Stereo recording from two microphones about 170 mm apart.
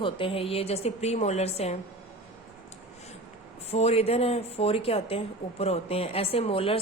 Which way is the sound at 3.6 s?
40° left (ahead or behind).